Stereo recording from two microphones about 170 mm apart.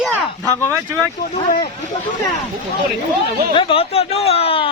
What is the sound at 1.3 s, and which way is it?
Speech, 35° left (ahead or behind).